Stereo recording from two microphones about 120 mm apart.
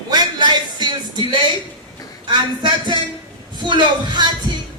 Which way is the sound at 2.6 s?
40° right (ahead or behind).